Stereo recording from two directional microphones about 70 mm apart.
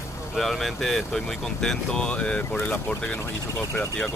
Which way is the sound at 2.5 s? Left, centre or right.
Left.